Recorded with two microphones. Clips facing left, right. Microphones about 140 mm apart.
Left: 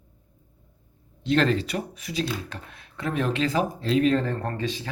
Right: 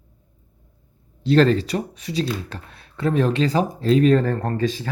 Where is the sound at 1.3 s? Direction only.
35° right (ahead or behind).